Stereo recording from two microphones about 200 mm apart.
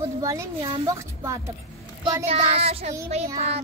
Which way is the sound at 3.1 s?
35° right (ahead or behind).